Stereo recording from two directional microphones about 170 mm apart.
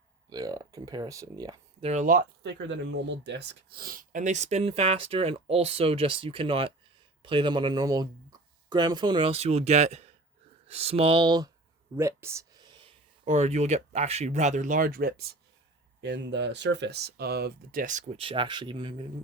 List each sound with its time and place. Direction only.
0.3 s speech: 20° right (ahead or behind)
1.8 s speech: 45° right (ahead or behind)
2.4 s speech: 90° right; by 11.5 s 25° right (ahead or behind)
11.9 s a sound: 15° right (ahead or behind)
13.2 s speech: 40° right (ahead or behind); by 15.4 s 65° right (ahead or behind)
16.0 s speech: 90° right; by 18.2 s 50° right (ahead or behind)
18.2 s speech: 30° right (ahead or behind)